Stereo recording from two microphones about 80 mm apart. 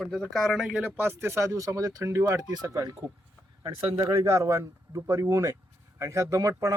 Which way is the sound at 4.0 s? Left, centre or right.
Right.